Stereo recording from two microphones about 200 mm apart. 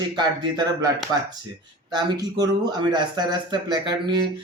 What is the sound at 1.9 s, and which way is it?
Speech, 20° right (ahead or behind).